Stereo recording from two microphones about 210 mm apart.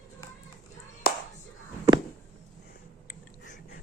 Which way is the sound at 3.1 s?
40° left (ahead or behind).